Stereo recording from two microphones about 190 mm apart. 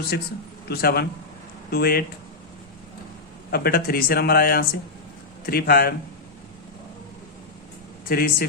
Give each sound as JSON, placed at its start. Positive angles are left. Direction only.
{"t": 0.1, "sound": "speech", "side_deg": 55}
{"t": 3.5, "sound": "speech", "side_deg": 55}
{"t": 8.0, "sound": "speech", "side_deg": 50}